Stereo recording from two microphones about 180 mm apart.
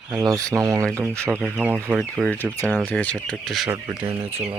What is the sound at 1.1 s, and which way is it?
Speech, 5° left (ahead or behind).